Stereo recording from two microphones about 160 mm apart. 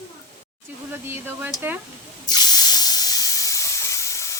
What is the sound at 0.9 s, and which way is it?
Speech, 15° right (ahead or behind).